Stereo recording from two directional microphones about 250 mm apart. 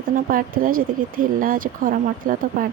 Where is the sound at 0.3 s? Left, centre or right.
Right.